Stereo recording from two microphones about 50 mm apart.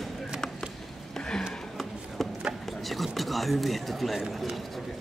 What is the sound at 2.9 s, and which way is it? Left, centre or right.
Speech, centre.